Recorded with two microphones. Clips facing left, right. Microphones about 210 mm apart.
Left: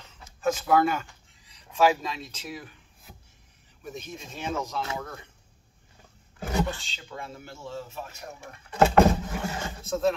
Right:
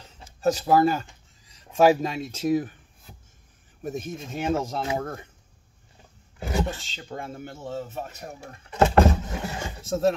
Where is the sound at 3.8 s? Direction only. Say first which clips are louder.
Right 7 dB; 50° right (ahead or behind).